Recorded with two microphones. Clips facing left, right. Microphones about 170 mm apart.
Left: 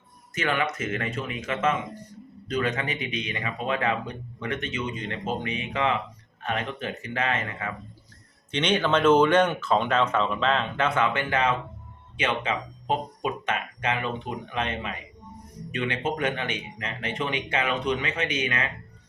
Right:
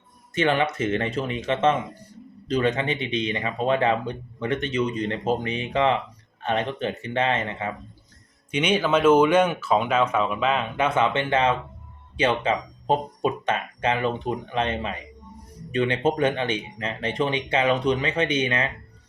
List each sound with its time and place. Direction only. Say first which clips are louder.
0.3 s speech: right 5 dB; 30° right (ahead or behind)
8.4 s speech: right 2 dB; 10° right (ahead or behind); by 18.7 s 30° right (ahead or behind)